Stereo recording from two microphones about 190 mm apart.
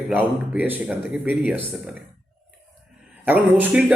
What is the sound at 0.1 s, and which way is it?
A man's voice, 10° right (ahead or behind).